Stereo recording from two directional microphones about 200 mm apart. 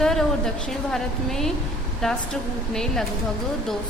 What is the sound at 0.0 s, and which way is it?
A woman's voice, centre (ahead or behind).